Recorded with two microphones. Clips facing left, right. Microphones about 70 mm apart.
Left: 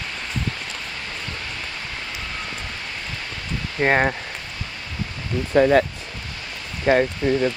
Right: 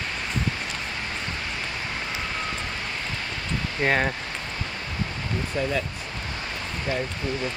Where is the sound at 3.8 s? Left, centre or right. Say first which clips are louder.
Left 5 dB; left.